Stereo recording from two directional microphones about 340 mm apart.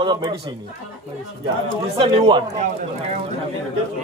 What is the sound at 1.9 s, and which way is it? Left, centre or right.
Speech, centre.